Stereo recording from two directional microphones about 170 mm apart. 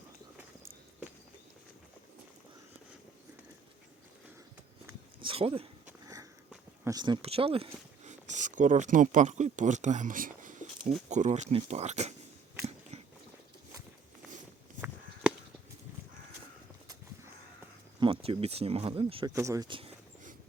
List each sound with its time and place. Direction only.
5.2 s speech: 30° right (ahead or behind)
8.0 s speech: 45° right (ahead or behind)
18.0 s speech: 35° right (ahead or behind)